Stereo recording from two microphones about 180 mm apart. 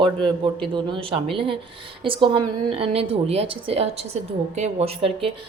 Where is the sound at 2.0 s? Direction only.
30° right (ahead or behind).